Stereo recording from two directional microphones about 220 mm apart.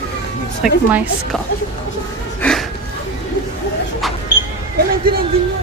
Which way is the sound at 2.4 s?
5° left (ahead or behind).